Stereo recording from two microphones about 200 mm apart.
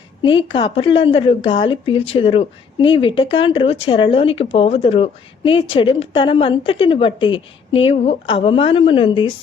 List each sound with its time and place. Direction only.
0.2 s a woman's voice: 25° left (ahead or behind)